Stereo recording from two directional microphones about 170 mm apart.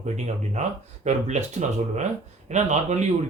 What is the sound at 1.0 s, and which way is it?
A man's voice, 40° right (ahead or behind).